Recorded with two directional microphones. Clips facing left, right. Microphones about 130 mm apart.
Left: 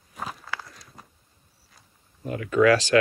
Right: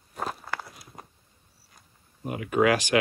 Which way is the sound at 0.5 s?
10° right (ahead or behind).